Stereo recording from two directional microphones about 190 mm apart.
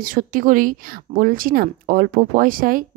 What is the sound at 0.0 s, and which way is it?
A woman's voice, 45° right (ahead or behind).